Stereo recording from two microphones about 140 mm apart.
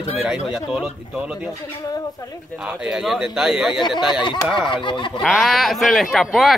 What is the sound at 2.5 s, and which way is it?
Speech, 10° right (ahead or behind).